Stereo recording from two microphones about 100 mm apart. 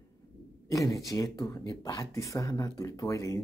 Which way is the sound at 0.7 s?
35° left (ahead or behind).